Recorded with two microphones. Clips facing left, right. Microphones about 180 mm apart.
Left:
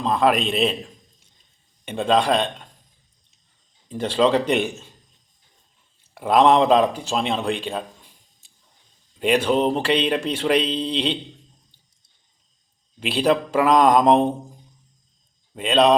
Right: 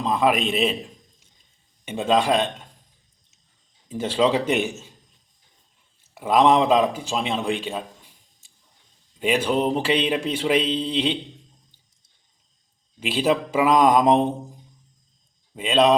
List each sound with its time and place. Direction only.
0.0 s speech: 5° right (ahead or behind)
1.8 s speech: 5° right (ahead or behind)
3.8 s speech: 10° right (ahead or behind)
6.1 s speech: 5° right (ahead or behind)
9.1 s speech: 5° right (ahead or behind)
13.0 s speech: 5° right (ahead or behind)
15.5 s speech: 5° right (ahead or behind)